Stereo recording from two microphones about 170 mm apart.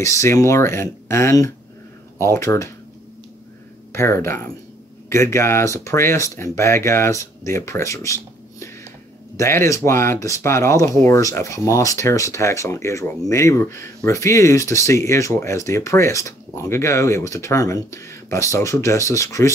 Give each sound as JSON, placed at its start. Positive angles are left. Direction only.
{"t": 0.0, "sound": "speech", "side_deg": 15}
{"t": 3.9, "sound": "speech", "side_deg": 15}